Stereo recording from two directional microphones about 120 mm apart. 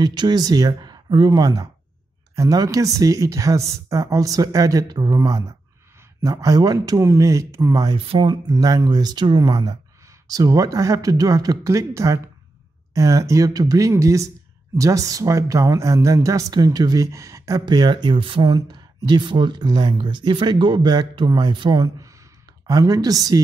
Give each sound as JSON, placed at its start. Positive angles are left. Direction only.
{"t": 0.0, "sound": "a woman's voice", "side_deg": -40}
{"t": 8.0, "sound": "a woman's voice", "side_deg": -45}